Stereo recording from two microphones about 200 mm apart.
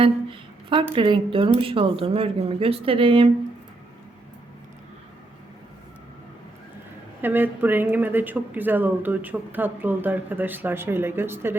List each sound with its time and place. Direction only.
0.0 s speech: 25° right (ahead or behind)
7.2 s speech: 10° right (ahead or behind)